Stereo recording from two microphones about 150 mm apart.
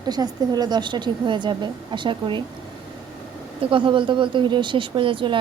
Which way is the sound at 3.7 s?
35° right (ahead or behind).